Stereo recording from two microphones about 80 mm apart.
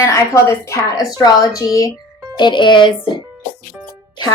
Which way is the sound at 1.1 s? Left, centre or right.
Left.